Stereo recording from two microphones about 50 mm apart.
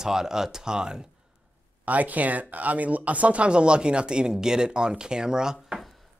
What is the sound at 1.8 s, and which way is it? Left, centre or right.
Speech, right.